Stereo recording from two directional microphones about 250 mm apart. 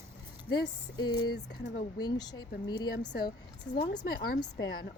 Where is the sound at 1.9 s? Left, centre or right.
Centre.